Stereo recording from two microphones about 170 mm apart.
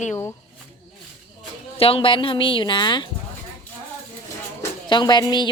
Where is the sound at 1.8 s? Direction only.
35° left (ahead or behind).